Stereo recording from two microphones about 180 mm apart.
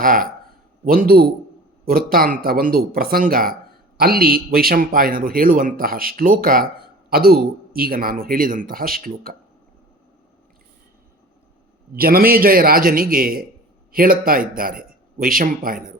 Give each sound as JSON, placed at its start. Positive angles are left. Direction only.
{"t": 0.0, "sound": "a man's voice", "side_deg": -50}
{"t": 11.9, "sound": "a man's voice", "side_deg": -55}